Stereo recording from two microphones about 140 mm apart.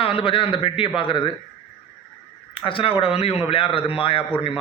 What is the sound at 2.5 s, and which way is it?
Speech, 40° left (ahead or behind).